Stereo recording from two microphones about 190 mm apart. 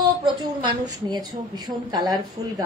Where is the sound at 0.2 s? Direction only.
25° right (ahead or behind).